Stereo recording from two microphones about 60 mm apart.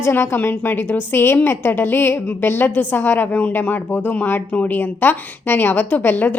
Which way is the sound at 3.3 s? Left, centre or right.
Left.